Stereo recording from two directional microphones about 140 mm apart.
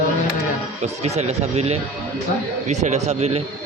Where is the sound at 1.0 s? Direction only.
50° right (ahead or behind).